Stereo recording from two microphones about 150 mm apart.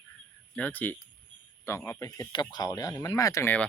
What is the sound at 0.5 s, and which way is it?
Speech, 10° left (ahead or behind).